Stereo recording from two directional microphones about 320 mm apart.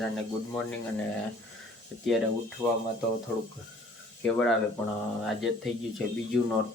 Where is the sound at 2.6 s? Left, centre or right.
Centre.